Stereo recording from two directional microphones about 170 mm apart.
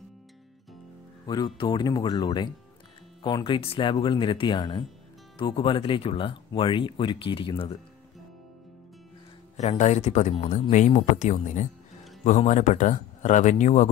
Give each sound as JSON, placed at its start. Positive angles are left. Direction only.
{"t": 1.2, "sound": "speech", "side_deg": 25}
{"t": 9.6, "sound": "speech", "side_deg": 40}